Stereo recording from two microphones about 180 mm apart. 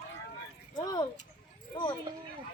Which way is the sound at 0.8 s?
20° left (ahead or behind).